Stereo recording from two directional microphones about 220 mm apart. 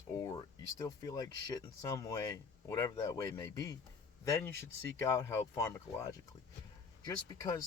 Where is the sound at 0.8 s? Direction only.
15° left (ahead or behind).